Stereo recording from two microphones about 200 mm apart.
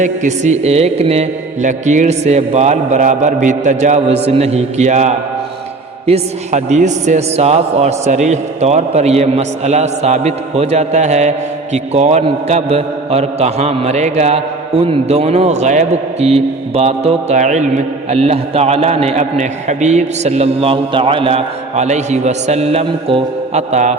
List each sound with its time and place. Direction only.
0.0 s a man's voice: 35° right (ahead or behind)